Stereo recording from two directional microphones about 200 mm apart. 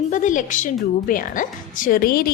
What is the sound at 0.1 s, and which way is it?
A woman's voice, 40° left (ahead or behind).